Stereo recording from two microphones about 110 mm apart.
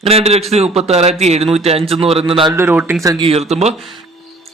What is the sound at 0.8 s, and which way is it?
A man's voice, 80° right.